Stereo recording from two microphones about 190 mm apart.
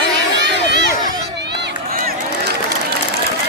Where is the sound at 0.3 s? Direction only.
65° right (ahead or behind).